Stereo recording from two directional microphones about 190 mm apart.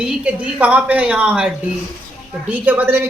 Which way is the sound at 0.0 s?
5° right (ahead or behind).